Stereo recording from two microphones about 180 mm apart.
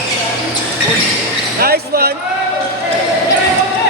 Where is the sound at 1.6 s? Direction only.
60° right (ahead or behind).